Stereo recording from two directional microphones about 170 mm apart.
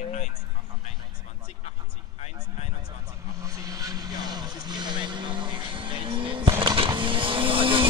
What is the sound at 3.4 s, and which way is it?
Vehicle, 20° right (ahead or behind).